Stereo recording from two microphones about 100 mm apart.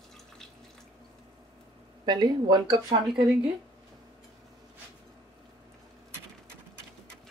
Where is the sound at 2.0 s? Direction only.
45° right (ahead or behind).